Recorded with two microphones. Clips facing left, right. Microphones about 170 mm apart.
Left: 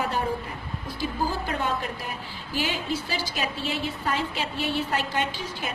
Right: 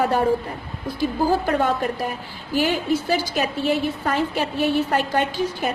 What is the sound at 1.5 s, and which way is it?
A woman's voice, 50° right (ahead or behind).